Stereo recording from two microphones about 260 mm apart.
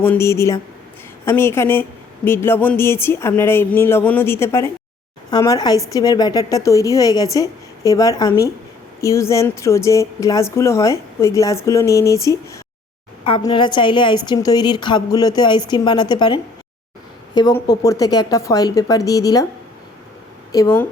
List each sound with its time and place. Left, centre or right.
0.0 s speech: centre
20.5 s speech: centre